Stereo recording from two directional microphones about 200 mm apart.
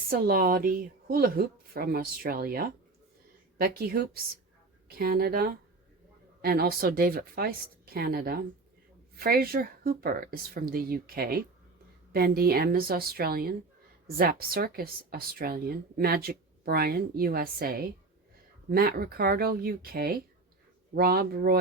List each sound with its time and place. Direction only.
0.1 s speech: 45° right (ahead or behind)